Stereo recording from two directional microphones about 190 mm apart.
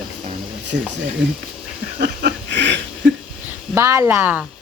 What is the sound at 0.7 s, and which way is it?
Speech, 55° right (ahead or behind).